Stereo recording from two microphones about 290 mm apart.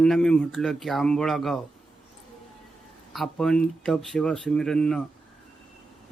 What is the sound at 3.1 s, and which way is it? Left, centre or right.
Speech, centre.